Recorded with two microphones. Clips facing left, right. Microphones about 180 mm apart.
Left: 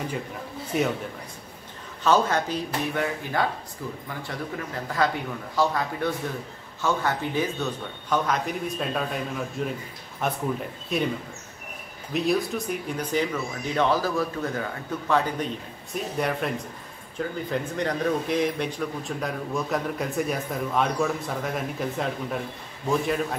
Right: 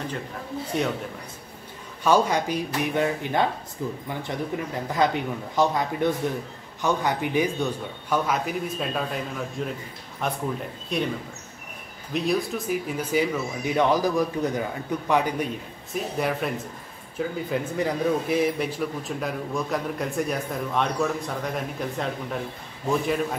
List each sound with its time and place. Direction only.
0.7 s a man's voice: 5° left (ahead or behind)
2.0 s a man's voice: 10° right (ahead or behind)
12.1 s a man's voice: centre (ahead or behind)